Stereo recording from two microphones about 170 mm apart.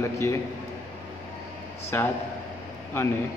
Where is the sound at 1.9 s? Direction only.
15° left (ahead or behind).